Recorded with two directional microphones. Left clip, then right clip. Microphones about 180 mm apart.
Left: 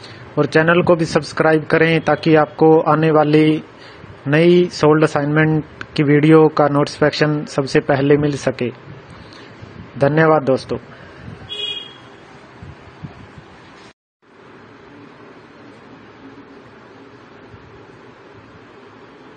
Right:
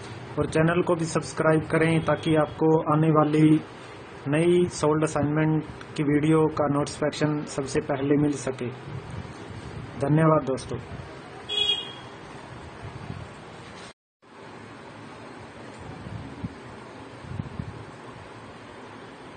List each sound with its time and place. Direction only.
0.4 s a man's voice: 35° left (ahead or behind)
8.5 s speech: 50° left (ahead or behind)
9.9 s a man's voice: 40° left (ahead or behind)